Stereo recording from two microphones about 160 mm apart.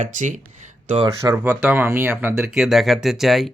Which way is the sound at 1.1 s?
15° right (ahead or behind).